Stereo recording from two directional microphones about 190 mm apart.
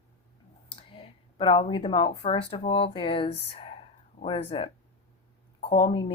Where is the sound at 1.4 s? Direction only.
25° left (ahead or behind).